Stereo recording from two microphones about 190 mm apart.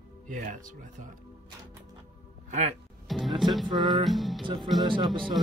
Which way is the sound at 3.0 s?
Centre (ahead or behind).